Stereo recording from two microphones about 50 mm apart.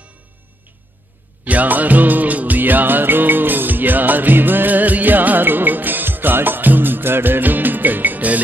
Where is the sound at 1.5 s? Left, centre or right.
Right.